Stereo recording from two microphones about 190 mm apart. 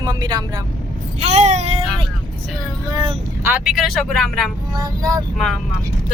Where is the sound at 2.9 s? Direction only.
20° right (ahead or behind).